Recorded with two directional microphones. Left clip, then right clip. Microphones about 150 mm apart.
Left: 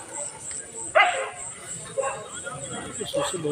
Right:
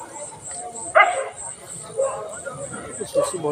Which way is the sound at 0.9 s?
10° left (ahead or behind).